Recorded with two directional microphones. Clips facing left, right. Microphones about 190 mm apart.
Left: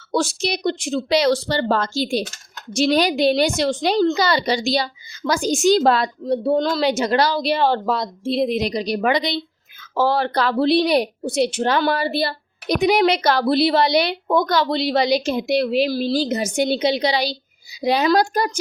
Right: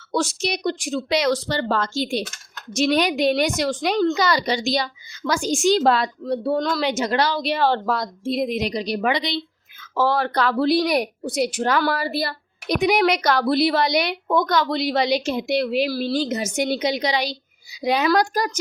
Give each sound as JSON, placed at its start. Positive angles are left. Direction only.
{"t": 0.1, "sound": "speech", "side_deg": 30}
{"t": 6.2, "sound": "speech", "side_deg": 20}
{"t": 7.6, "sound": "speech", "side_deg": 20}
{"t": 9.9, "sound": "speech", "side_deg": 30}
{"t": 15.9, "sound": "speech", "side_deg": 20}
{"t": 16.1, "sound": "speech", "side_deg": 35}